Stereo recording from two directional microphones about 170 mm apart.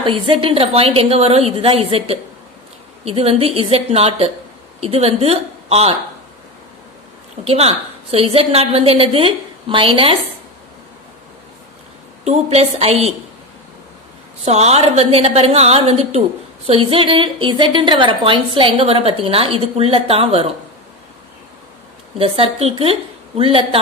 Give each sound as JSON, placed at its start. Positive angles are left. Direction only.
{"t": 0.0, "sound": "a woman's voice", "side_deg": -30}
{"t": 7.4, "sound": "a woman's voice", "side_deg": -35}
{"t": 12.3, "sound": "a woman's voice", "side_deg": -40}
{"t": 14.4, "sound": "a woman's voice", "side_deg": -40}
{"t": 22.2, "sound": "a woman's voice", "side_deg": -35}